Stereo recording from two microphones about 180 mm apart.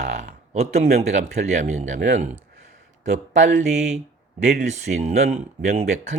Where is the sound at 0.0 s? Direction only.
45° right (ahead or behind).